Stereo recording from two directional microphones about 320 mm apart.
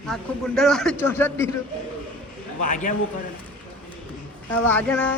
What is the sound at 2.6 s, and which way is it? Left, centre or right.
Speech, left.